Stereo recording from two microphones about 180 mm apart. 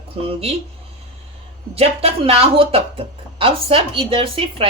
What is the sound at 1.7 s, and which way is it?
Speech, 35° right (ahead or behind).